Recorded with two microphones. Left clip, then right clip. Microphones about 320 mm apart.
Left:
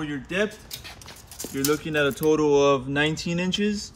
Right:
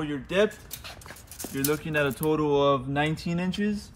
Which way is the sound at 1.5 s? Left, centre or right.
Centre.